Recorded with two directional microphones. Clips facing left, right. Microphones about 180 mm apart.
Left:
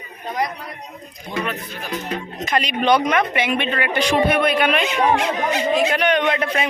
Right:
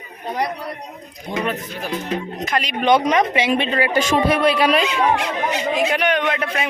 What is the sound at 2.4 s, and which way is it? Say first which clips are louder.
Speech: left 1 dB; centre (ahead or behind).